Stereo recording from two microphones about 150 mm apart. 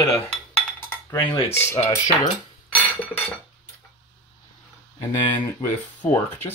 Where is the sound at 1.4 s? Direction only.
15° left (ahead or behind).